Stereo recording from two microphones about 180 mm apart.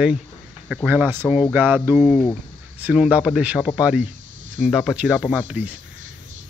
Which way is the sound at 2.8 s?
5° right (ahead or behind).